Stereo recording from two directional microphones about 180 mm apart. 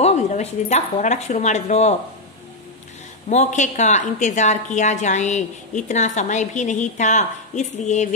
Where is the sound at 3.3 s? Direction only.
40° left (ahead or behind).